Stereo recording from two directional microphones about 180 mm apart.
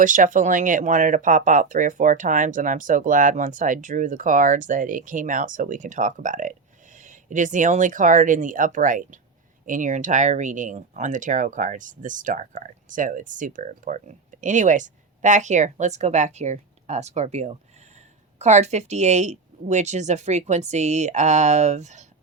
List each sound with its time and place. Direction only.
0.0 s speech: 45° right (ahead or behind)